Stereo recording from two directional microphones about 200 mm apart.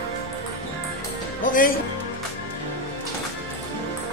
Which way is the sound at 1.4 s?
45° left (ahead or behind).